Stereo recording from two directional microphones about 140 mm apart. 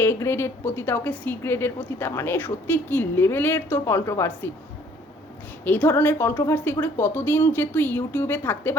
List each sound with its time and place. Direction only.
0.0 s a woman's voice: 20° left (ahead or behind)
5.6 s a woman's voice: 15° left (ahead or behind)